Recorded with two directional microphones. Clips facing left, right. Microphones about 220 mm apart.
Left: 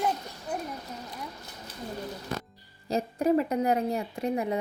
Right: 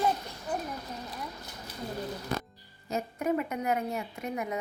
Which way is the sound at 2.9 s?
35° left (ahead or behind).